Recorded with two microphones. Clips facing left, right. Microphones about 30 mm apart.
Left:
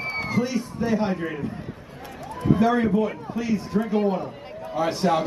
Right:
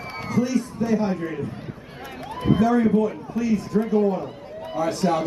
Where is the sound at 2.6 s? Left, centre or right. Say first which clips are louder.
Right 2 dB; left.